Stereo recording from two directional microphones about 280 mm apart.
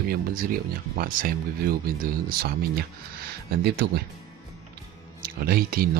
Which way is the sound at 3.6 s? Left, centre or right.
Right.